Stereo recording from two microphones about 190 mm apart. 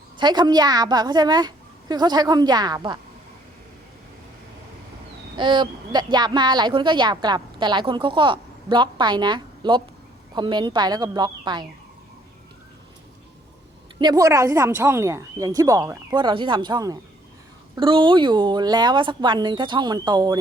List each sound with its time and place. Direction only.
0.2 s speech: 25° right (ahead or behind)
5.4 s speech: 25° right (ahead or behind)
14.0 s speech: 20° right (ahead or behind)